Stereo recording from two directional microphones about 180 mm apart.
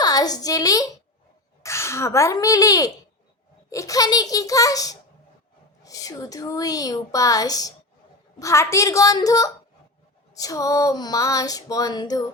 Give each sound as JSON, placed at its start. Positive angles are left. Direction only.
{"t": 0.0, "sound": "a woman's voice", "side_deg": 20}